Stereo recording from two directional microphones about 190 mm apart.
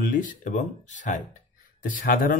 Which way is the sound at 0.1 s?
45° left (ahead or behind).